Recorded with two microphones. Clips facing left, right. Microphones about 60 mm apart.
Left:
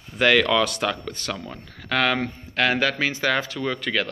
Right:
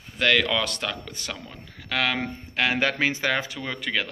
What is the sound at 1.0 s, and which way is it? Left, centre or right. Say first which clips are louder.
Speech: left 5 dB; centre.